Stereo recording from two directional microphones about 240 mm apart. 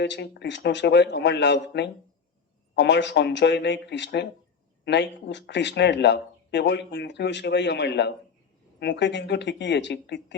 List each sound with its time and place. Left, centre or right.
0.0 s speech: left